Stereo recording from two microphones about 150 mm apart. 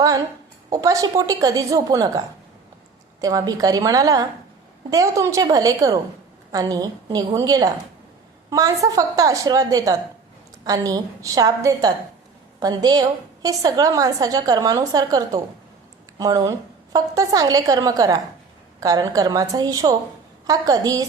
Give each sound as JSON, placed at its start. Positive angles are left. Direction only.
{"t": 0.7, "sound": "a woman's voice", "side_deg": -25}